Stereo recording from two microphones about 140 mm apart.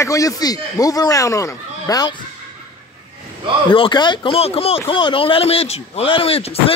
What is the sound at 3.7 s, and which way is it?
Speech, 35° left (ahead or behind).